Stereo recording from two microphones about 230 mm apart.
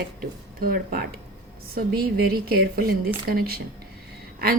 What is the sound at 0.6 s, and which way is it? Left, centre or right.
Speech, right.